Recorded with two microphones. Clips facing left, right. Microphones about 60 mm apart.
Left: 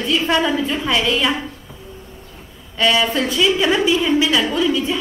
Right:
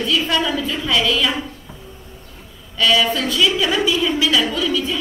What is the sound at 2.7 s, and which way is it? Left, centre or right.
A woman's voice, left.